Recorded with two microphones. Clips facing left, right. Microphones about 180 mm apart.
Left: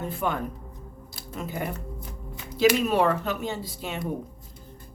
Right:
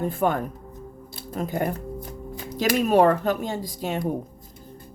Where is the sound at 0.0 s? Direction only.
45° right (ahead or behind).